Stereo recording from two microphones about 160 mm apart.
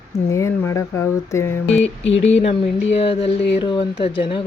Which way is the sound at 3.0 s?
35° left (ahead or behind).